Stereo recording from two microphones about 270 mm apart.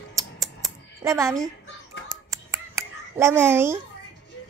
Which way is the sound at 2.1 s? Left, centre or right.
Centre.